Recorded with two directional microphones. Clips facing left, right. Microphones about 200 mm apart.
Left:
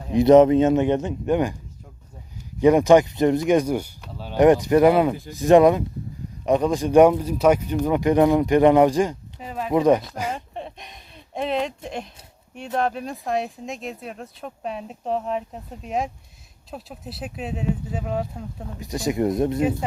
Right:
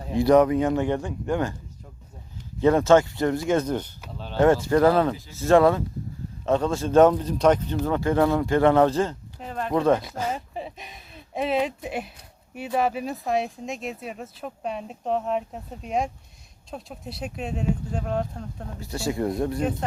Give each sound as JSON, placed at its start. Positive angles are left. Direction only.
{"t": 0.1, "sound": "speech", "side_deg": 20}
{"t": 2.6, "sound": "speech", "side_deg": 15}
{"t": 10.3, "sound": "a sound", "side_deg": -5}
{"t": 12.5, "sound": "speech", "side_deg": -5}
{"t": 18.8, "sound": "speech", "side_deg": 15}